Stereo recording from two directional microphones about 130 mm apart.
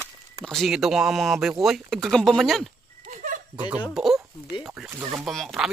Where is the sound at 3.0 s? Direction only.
70° right (ahead or behind).